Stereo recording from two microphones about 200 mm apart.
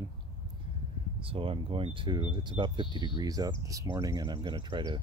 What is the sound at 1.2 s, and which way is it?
Speech, 25° right (ahead or behind).